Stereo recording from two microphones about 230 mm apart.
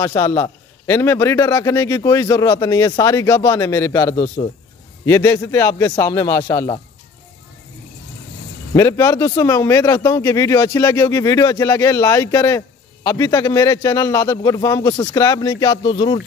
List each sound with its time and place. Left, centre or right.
0.0 s speech: centre
8.7 s speech: centre